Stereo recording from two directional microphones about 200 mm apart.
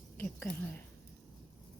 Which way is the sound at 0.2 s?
5° left (ahead or behind).